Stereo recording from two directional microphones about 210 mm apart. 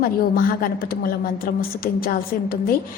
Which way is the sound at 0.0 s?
45° left (ahead or behind).